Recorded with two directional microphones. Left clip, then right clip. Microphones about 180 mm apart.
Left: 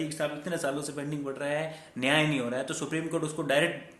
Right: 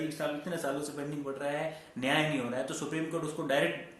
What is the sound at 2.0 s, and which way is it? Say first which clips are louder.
Speech: left 4 dB; 45° left (ahead or behind).